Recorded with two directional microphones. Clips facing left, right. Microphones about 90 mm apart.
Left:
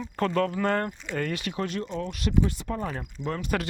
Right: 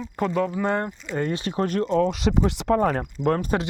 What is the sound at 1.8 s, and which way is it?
Speech, 90° right.